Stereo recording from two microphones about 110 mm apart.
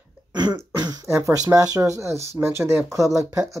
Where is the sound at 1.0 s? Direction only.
25° right (ahead or behind).